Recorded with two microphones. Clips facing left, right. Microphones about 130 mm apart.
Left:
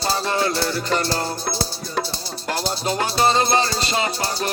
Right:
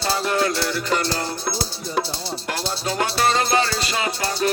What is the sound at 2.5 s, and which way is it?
Music, 25° left (ahead or behind).